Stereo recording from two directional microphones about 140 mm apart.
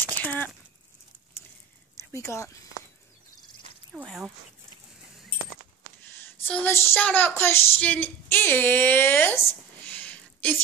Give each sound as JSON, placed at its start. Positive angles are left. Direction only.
{"t": 0.1, "sound": "a sound", "side_deg": 10}
{"t": 2.1, "sound": "speech", "side_deg": 20}
{"t": 4.0, "sound": "speech", "side_deg": 0}
{"t": 6.2, "sound": "speech", "side_deg": 15}